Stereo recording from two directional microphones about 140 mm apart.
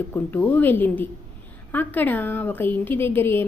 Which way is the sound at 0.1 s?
15° left (ahead or behind).